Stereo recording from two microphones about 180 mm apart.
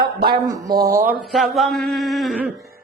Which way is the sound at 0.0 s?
60° right (ahead or behind).